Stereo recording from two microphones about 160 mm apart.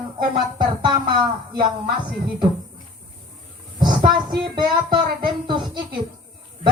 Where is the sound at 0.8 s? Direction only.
30° right (ahead or behind).